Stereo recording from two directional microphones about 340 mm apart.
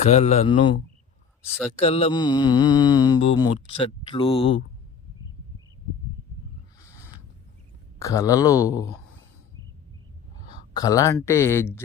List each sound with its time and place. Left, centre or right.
0.0 s speech: centre
1.8 s mantra: centre
7.9 s mantra: centre
10.8 s mantra: centre